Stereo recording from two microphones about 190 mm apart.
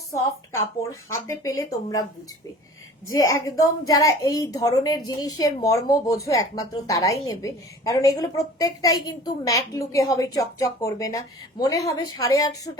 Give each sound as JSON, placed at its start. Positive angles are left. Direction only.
{"t": 0.8, "sound": "a woman's voice", "side_deg": 15}
{"t": 3.1, "sound": "a woman's voice", "side_deg": 15}